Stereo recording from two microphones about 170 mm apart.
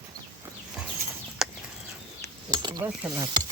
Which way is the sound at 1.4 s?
5° right (ahead or behind).